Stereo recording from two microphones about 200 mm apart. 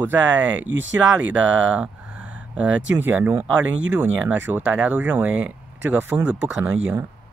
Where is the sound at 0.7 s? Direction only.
70° right (ahead or behind).